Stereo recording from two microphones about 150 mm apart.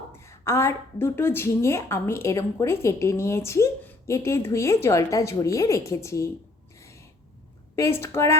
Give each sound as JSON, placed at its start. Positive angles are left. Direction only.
{"t": 0.1, "sound": "a woman's voice", "side_deg": 20}
{"t": 6.7, "sound": "a sound", "side_deg": 20}
{"t": 7.8, "sound": "a woman's voice", "side_deg": 15}